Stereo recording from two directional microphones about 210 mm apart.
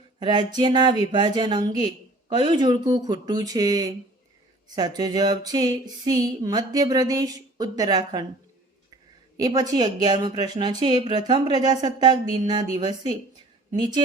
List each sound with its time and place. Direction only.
0.2 s speech: 20° right (ahead or behind)
9.4 s speech: 15° right (ahead or behind)